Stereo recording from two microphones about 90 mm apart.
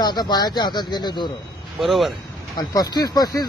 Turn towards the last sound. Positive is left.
turn(degrees=45)  # may be behind; listen again after turning